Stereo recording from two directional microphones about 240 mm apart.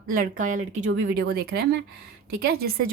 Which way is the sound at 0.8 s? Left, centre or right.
Right.